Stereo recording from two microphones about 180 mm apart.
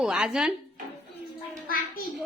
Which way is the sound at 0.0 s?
5° right (ahead or behind).